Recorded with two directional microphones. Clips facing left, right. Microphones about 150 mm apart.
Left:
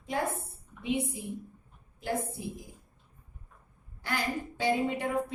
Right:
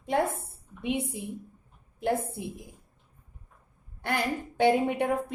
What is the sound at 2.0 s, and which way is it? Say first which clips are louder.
Speech: right 5 dB; 60° right (ahead or behind).